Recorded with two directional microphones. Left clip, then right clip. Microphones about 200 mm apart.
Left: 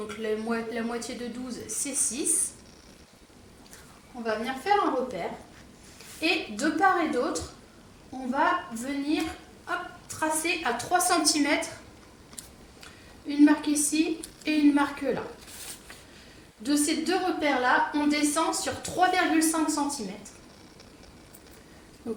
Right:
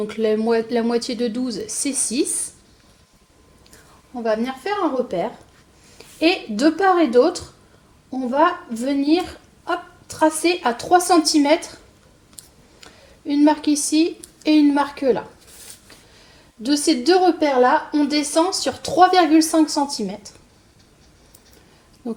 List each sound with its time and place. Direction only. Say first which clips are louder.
0.1 s speech: right 11 dB; 35° right (ahead or behind)
4.2 s a woman's voice: right 8 dB; 40° right (ahead or behind)
8.7 s speech: right 11 dB; 35° right (ahead or behind)
12.8 s a woman's voice: right 8 dB; 25° right (ahead or behind)
16.6 s speech: right 9 dB; 30° right (ahead or behind)
22.0 s speech: right 5 dB; 25° right (ahead or behind)